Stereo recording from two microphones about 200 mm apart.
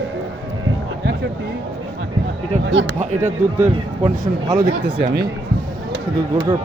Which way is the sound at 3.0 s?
35° right (ahead or behind).